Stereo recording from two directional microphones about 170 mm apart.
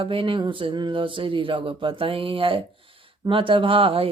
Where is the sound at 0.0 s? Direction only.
30° right (ahead or behind).